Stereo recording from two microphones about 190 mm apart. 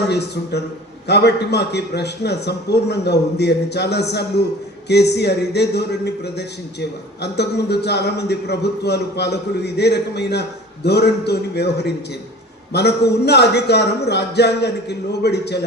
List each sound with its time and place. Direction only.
0.1 s speech: 60° left (ahead or behind)